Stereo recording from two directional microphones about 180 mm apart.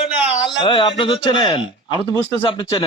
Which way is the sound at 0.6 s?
30° left (ahead or behind).